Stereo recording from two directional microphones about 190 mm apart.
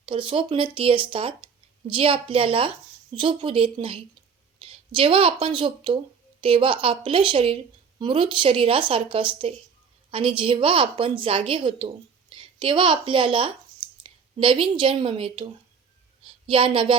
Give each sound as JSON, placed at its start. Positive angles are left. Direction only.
{"t": 0.0, "sound": "a woman's voice", "side_deg": -25}
{"t": 16.5, "sound": "a woman's voice", "side_deg": -30}